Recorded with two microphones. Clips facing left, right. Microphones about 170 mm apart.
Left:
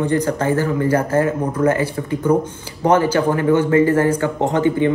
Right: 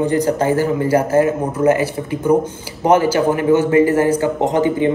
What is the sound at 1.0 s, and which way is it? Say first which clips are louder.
Speech: right 3 dB; 25° right (ahead or behind).